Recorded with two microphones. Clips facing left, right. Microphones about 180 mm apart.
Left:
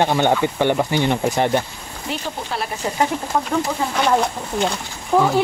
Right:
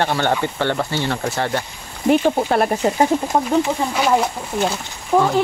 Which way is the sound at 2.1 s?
50° right (ahead or behind).